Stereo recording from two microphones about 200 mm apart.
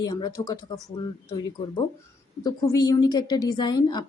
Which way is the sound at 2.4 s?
20° left (ahead or behind).